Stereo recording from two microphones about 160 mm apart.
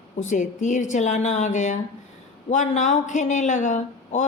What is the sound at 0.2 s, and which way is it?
Speech, 50° left (ahead or behind).